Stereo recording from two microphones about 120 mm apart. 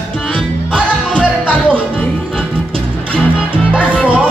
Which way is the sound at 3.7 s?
10° right (ahead or behind).